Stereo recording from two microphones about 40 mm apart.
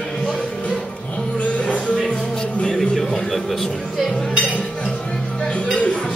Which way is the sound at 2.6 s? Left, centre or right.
Centre.